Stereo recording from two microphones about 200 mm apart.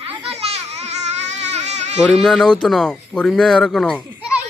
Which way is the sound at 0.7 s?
35° right (ahead or behind).